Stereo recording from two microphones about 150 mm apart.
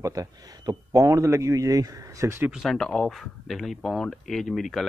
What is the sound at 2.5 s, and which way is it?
Speech, centre (ahead or behind).